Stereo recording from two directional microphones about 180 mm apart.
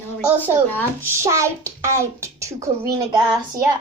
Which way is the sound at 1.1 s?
15° right (ahead or behind).